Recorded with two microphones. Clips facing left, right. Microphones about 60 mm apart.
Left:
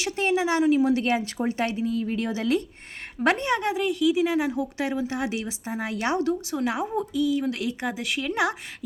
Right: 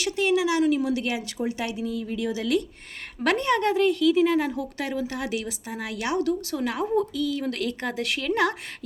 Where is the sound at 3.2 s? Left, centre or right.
Left.